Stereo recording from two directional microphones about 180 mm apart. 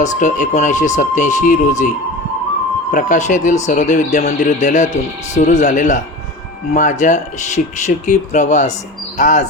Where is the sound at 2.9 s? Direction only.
45° left (ahead or behind).